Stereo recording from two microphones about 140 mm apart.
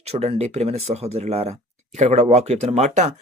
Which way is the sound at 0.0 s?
50° right (ahead or behind).